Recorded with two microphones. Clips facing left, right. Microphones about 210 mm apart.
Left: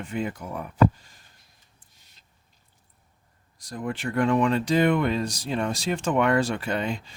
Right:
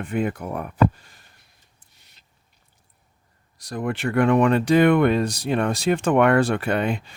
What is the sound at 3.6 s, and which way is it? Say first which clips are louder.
Speech: right 5 dB; 75° right (ahead or behind).